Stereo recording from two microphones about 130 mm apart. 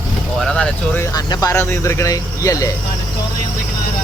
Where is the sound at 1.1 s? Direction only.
25° left (ahead or behind).